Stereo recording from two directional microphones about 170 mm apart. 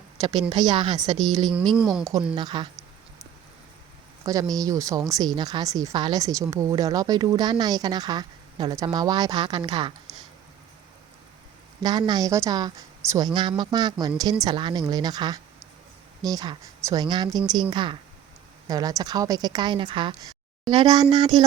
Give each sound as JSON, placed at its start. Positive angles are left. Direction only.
{"t": 0.5, "sound": "a woman's voice", "side_deg": -25}
{"t": 1.2, "sound": "speech", "side_deg": 0}
{"t": 2.3, "sound": "a woman's voice", "side_deg": -25}
{"t": 4.3, "sound": "a woman's voice", "side_deg": -20}
{"t": 11.8, "sound": "a woman's voice", "side_deg": -25}
{"t": 21.3, "sound": "speech", "side_deg": 0}